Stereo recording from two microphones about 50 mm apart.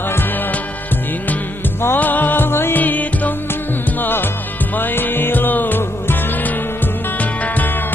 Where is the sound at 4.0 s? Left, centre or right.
Left.